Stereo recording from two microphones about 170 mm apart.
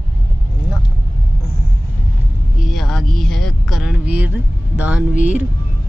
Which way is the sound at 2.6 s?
Centre (ahead or behind).